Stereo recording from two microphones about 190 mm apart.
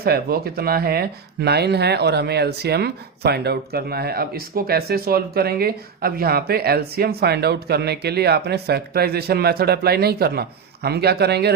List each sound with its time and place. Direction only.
0.0 s speech: 55° right (ahead or behind)